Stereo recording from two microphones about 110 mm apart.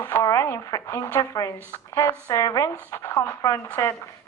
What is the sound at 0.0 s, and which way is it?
Speech, 25° left (ahead or behind).